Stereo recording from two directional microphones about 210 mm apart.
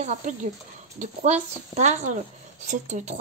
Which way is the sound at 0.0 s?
35° right (ahead or behind).